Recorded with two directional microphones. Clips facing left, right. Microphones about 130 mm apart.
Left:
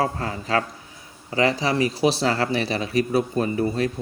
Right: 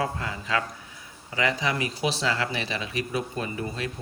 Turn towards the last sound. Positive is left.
turn(degrees=40)  # may be behind; listen again after turning